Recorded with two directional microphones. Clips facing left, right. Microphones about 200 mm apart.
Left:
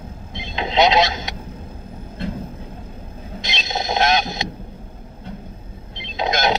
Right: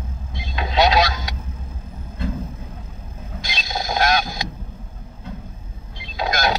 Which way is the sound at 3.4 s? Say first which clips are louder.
Left 2 dB; 25° left (ahead or behind).